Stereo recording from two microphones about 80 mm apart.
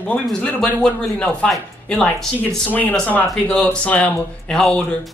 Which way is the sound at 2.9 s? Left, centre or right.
Centre.